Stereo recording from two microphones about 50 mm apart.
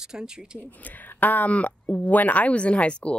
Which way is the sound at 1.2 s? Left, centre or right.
Left.